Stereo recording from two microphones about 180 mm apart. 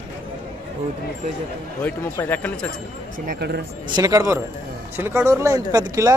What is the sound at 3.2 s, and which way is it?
Speech, 65° right (ahead or behind).